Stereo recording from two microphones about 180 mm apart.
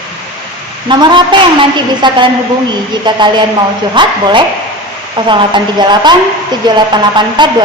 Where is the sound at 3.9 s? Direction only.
25° right (ahead or behind).